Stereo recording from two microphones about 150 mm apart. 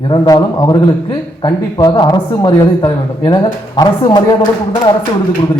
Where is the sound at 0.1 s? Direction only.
30° left (ahead or behind).